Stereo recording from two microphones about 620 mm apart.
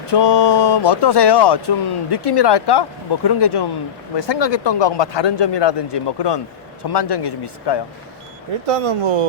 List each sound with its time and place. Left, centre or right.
0.1 s speech: left
8.6 s speech: right